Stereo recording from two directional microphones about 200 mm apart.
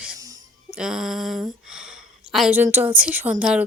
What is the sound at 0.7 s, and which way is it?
Speech, 5° right (ahead or behind).